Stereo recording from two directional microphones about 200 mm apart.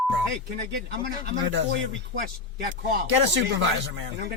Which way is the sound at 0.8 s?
60° right (ahead or behind).